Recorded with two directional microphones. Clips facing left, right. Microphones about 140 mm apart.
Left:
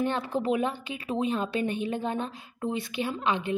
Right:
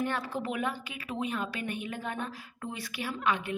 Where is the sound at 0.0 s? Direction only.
25° left (ahead or behind).